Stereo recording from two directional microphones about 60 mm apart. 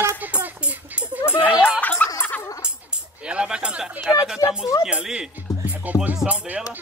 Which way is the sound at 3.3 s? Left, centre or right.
Centre.